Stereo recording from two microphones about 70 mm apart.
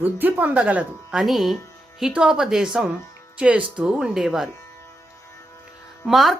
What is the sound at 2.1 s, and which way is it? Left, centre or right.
Speech, centre.